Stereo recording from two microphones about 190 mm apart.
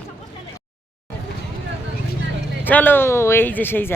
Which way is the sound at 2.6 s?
10° left (ahead or behind).